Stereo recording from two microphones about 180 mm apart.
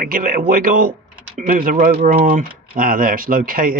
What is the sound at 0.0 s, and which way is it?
Speech, 50° right (ahead or behind).